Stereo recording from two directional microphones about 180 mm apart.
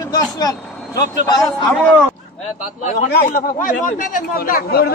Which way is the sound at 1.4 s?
5° left (ahead or behind).